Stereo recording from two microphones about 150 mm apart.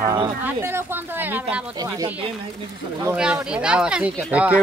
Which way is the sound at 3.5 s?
5° right (ahead or behind).